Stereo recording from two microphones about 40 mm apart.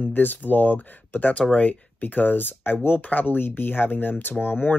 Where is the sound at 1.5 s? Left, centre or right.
Left.